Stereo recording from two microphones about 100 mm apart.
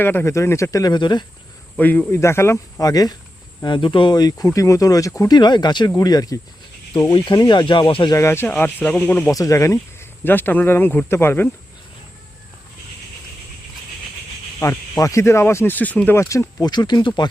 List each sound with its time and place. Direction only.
0.0 s speech: 20° left (ahead or behind); by 1.2 s 50° left (ahead or behind)
1.7 s speech: 15° left (ahead or behind); by 3.2 s 40° left (ahead or behind)
3.6 s speech: 55° left (ahead or behind)
8.1 s speech: 25° left (ahead or behind)
9.3 s speech: 35° left (ahead or behind)
14.6 s speech: 30° left (ahead or behind)
16.6 s speech: 45° left (ahead or behind)